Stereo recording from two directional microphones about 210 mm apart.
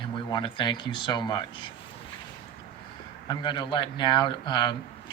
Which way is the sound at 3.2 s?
20° left (ahead or behind).